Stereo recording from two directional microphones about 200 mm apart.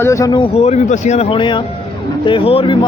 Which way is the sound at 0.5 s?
35° left (ahead or behind).